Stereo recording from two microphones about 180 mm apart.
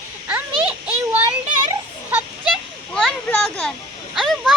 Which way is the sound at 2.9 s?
5° left (ahead or behind).